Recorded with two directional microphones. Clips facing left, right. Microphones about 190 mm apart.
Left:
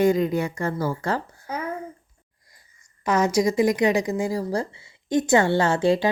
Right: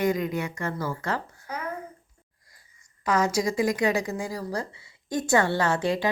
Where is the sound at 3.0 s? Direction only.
20° left (ahead or behind).